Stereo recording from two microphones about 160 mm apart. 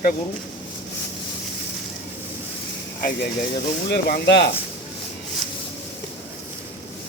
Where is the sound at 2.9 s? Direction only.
60° left (ahead or behind).